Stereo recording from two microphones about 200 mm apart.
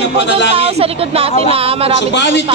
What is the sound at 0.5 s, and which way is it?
A woman's voice, 30° right (ahead or behind).